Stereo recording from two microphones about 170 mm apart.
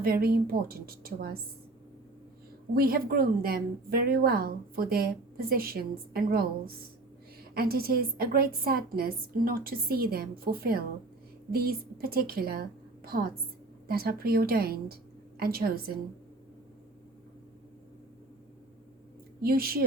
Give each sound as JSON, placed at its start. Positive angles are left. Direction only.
{"t": 0.0, "sound": "a woman's voice", "side_deg": -60}
{"t": 2.7, "sound": "a woman's voice", "side_deg": -60}
{"t": 19.4, "sound": "a woman's voice", "side_deg": -60}